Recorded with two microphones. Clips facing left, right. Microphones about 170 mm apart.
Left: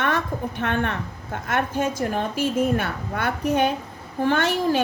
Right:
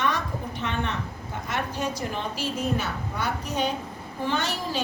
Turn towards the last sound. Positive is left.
turn(degrees=55)  # may be behind; listen again after turning